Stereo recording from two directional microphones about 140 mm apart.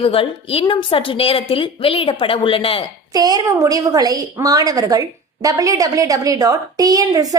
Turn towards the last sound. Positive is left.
turn(degrees=-25)  # may be behind; listen again after turning